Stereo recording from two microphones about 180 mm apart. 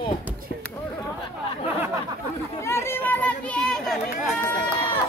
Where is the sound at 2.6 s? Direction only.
15° left (ahead or behind).